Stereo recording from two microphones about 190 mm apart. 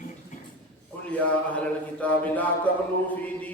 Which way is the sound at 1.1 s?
5° left (ahead or behind).